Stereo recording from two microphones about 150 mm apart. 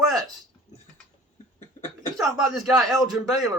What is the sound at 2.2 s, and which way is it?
Speech, centre (ahead or behind).